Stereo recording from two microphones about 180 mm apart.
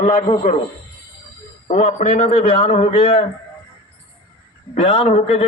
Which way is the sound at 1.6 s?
35° left (ahead or behind).